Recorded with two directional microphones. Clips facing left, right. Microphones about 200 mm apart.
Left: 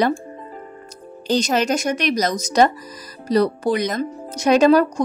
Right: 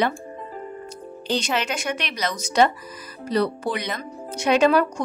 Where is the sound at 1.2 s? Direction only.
40° left (ahead or behind).